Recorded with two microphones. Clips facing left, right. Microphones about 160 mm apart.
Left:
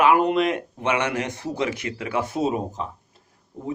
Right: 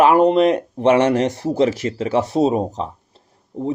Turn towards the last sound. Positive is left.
turn(degrees=-30)  # may be behind; listen again after turning